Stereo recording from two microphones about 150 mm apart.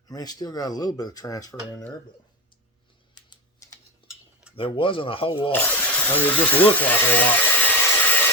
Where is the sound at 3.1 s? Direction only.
30° left (ahead or behind).